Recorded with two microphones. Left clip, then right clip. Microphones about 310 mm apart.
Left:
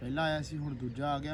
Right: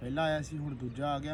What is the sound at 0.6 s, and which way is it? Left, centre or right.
Speech, centre.